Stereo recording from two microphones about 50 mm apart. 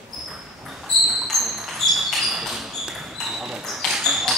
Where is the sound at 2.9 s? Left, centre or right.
Centre.